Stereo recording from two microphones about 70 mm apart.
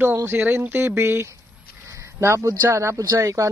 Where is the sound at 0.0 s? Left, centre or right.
Right.